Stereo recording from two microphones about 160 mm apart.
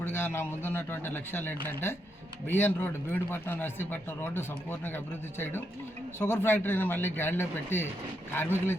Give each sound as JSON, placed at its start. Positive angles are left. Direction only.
{"t": 0.0, "sound": "speech", "side_deg": 15}
{"t": 6.1, "sound": "speech", "side_deg": 15}